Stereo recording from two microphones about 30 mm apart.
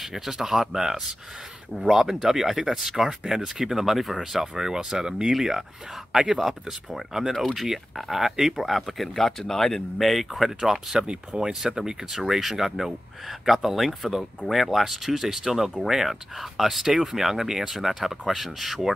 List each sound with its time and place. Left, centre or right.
0.0 s speech: centre
3.0 s speech: centre
3.8 s speech: centre; by 5.3 s right
5.3 s speech: centre
6.9 s speech: centre
9.1 s speech: centre
10.7 s speech: centre
11.3 s speech: right
12.1 s speech: centre